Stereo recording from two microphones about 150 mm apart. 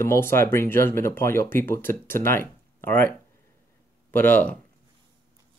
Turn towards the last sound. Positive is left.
turn(degrees=10)  # may be behind; listen again after turning